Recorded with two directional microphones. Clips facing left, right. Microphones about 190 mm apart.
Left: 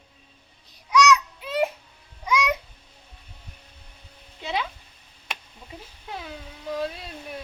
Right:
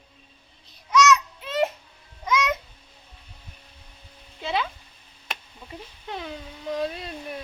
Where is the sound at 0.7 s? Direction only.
15° left (ahead or behind).